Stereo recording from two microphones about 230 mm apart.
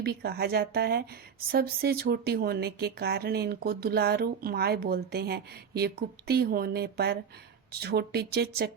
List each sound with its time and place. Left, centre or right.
0.0 s speech: right